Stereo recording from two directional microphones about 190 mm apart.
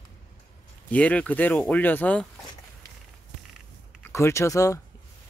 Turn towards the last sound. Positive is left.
turn(degrees=15)  # may be behind; listen again after turning